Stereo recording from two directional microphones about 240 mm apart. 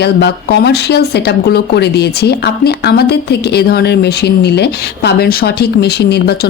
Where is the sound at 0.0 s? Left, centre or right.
Left.